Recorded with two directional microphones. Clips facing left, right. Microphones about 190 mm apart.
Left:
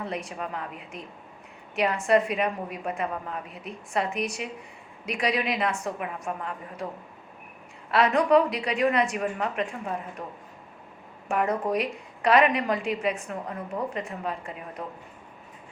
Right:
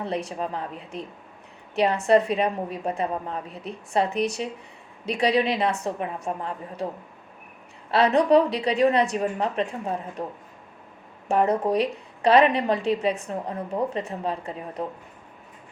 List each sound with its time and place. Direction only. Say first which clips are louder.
0.3 s a woman's voice: right 4 dB; 30° right (ahead or behind)
7.9 s a woman's voice: right 3 dB; 30° right (ahead or behind)
11.3 s a woman's voice: right 4 dB; 30° right (ahead or behind)